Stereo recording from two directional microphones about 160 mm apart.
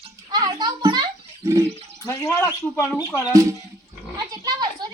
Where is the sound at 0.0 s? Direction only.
25° right (ahead or behind).